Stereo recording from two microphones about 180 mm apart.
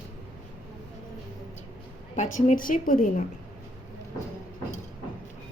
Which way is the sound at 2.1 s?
45° left (ahead or behind).